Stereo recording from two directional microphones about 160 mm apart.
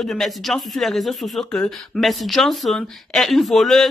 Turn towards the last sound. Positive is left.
turn(degrees=0)  # may be behind; listen again after turning